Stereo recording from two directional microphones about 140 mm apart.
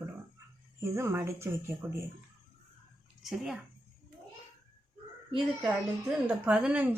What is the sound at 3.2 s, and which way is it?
Speech, 5° right (ahead or behind).